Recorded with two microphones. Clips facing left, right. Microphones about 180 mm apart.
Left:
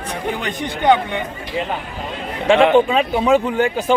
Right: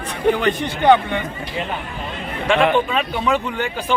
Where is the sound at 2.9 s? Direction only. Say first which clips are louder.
Left 4 dB; 30° left (ahead or behind).